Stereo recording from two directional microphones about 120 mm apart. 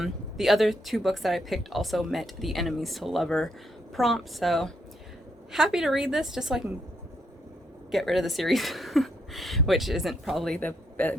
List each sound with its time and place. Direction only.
0.0 s speech: centre (ahead or behind)
7.9 s speech: centre (ahead or behind)
10.7 s speech: 15° left (ahead or behind)